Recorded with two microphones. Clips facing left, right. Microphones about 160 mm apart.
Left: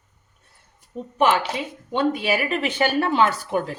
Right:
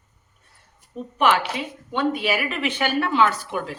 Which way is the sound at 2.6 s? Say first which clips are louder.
Left 2 dB; 45° left (ahead or behind).